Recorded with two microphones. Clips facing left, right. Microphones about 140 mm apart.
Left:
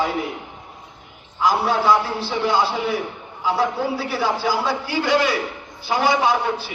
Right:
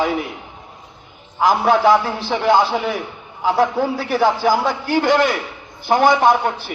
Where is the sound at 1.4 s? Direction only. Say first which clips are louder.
Right 4 dB; 55° right (ahead or behind).